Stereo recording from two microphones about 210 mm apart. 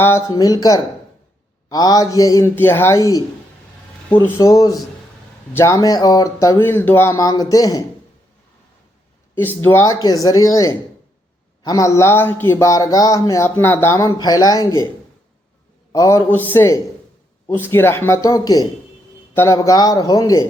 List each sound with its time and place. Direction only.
0.0 s speech: 15° left (ahead or behind)
9.6 s speech: 15° left (ahead or behind)
15.9 s speech: 15° left (ahead or behind)